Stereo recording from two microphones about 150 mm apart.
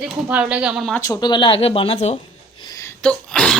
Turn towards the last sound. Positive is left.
turn(degrees=5)  # may be behind; listen again after turning